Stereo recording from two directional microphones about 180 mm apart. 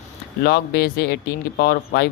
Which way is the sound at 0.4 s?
60° left (ahead or behind).